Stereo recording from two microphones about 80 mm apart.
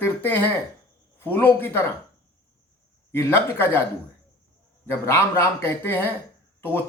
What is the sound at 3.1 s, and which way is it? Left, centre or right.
Speech, left.